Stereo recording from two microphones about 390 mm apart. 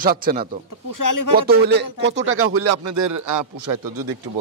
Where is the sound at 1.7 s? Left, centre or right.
Right.